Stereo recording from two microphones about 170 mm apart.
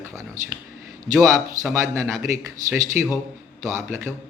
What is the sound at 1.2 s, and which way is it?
Speech, 20° right (ahead or behind).